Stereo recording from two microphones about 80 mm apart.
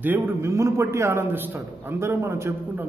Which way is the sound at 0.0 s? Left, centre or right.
Right.